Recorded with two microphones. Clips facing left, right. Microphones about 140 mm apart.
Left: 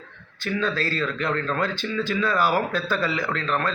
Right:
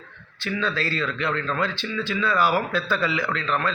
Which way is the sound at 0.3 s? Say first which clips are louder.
Left 1 dB; 45° left (ahead or behind).